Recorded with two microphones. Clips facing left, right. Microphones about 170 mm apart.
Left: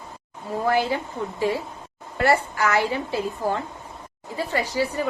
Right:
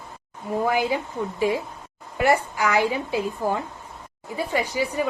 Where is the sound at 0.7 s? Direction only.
15° right (ahead or behind).